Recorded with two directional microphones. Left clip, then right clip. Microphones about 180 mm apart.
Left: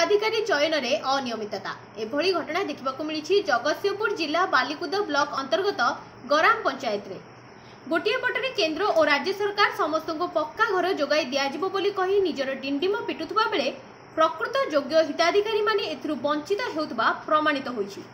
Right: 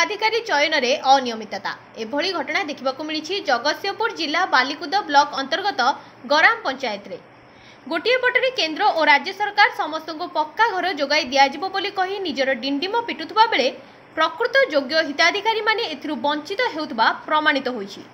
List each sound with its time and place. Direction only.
0.0 s a woman's voice: 35° right (ahead or behind)